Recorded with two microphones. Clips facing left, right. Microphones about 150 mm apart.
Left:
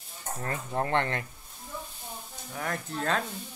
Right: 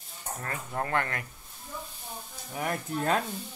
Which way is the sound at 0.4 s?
25° left (ahead or behind).